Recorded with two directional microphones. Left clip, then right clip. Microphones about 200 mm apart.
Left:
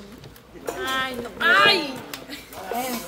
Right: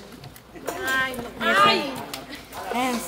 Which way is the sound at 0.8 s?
65° left (ahead or behind).